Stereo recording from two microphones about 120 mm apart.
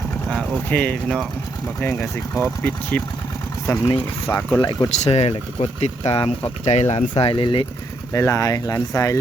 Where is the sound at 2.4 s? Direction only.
15° left (ahead or behind).